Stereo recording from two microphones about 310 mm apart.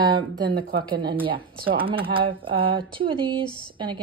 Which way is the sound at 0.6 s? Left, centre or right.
Right.